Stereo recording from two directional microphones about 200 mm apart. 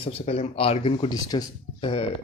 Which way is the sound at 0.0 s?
30° left (ahead or behind).